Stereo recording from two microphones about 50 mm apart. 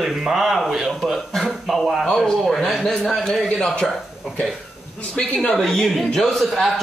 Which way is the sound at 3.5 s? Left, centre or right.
Centre.